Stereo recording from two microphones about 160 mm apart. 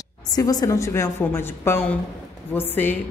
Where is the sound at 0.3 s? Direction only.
25° left (ahead or behind).